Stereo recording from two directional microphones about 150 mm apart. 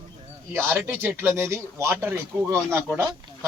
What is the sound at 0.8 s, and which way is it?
Speech, 15° right (ahead or behind).